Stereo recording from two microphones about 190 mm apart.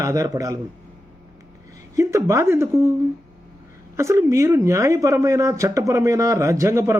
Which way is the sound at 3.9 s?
15° right (ahead or behind).